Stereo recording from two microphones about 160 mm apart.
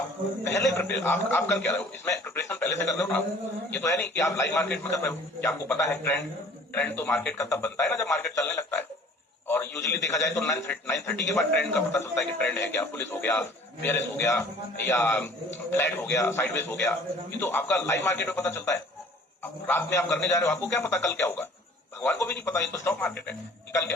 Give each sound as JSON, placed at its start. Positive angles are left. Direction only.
{"t": 0.4, "sound": "a man's voice", "side_deg": 15}